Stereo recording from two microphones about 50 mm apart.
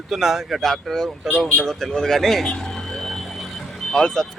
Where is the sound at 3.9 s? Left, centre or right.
Centre.